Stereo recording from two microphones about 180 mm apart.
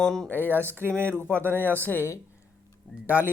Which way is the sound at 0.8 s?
15° right (ahead or behind).